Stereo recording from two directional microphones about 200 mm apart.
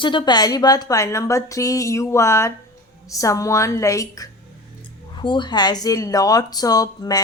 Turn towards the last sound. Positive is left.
turn(degrees=20)  # may be behind; listen again after turning